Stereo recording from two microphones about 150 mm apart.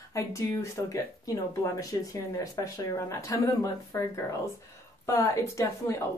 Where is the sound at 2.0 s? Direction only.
20° left (ahead or behind).